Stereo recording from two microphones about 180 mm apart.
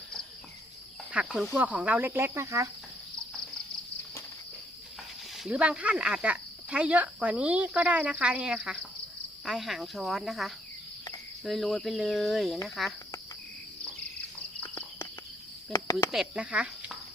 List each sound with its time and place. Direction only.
1.1 s speech: 5° right (ahead or behind)
5.4 s speech: 5° right (ahead or behind)
14.6 s a sound: 10° left (ahead or behind)
15.7 s cricket: 20° left (ahead or behind)
16.1 s speech: 5° right (ahead or behind)